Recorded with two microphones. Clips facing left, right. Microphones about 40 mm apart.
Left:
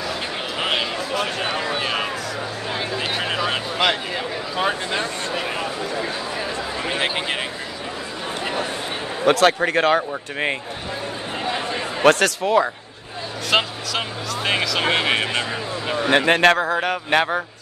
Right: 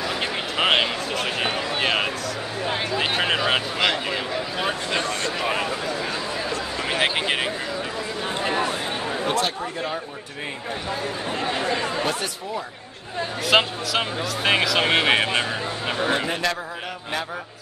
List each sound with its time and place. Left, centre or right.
0.6 s speech: right
1.8 s speech: right
3.0 s speech: right
4.6 s speech: centre
5.4 s speech: centre
6.9 s a sound: centre
9.2 s speech: left
12.0 s speech: left
13.5 s speech: centre
16.1 s a man's voice: left